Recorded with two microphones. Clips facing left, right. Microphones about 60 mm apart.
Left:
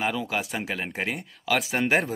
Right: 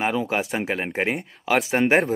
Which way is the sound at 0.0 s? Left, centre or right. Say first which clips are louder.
Right 4 dB; right.